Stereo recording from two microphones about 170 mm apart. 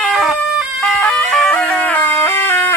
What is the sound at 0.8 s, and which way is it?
Music, 5° left (ahead or behind).